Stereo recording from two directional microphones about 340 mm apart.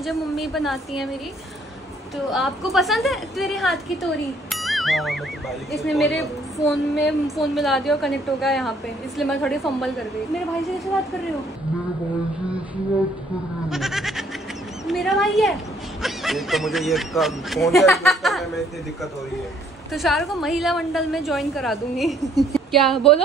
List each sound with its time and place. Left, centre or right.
0.0 s a woman's voice: centre
2.3 s a woman's voice: centre
13.7 s goat: centre
14.9 s a woman's voice: centre
19.9 s a woman's voice: centre